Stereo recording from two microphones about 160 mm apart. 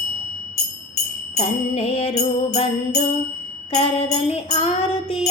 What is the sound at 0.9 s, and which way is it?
Music, 45° left (ahead or behind).